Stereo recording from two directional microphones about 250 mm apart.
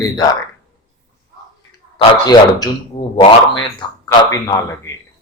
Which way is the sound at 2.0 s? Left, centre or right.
Centre.